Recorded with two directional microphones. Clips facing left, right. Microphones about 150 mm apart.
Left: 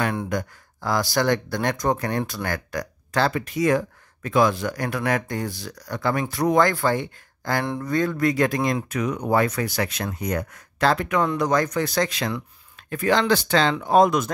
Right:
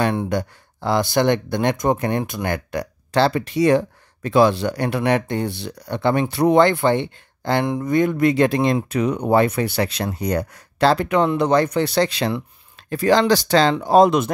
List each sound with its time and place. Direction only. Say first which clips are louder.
0.0 s speech: right 4 dB; 25° right (ahead or behind)